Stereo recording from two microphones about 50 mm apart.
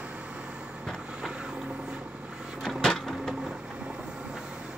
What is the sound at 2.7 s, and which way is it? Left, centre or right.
Printer, centre.